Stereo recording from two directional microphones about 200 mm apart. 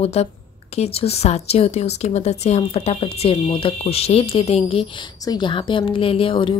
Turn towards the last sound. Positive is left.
turn(degrees=25)  # may be behind; listen again after turning